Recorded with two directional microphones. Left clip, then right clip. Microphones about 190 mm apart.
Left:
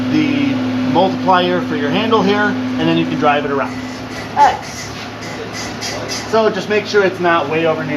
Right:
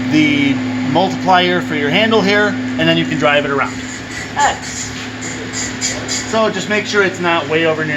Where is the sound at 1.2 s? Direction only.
55° right (ahead or behind).